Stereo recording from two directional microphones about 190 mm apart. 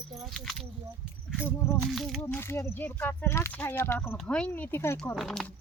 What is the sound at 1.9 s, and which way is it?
Speech, centre (ahead or behind).